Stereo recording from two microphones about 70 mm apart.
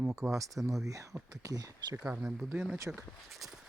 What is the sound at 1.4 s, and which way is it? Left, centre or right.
Speech, right.